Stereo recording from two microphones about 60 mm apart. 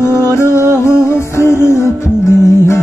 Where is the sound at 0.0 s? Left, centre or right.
Left.